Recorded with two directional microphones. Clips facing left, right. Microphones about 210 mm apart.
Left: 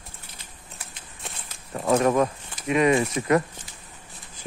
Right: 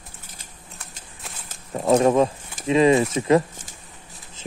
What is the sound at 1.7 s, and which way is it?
Speech, 25° right (ahead or behind).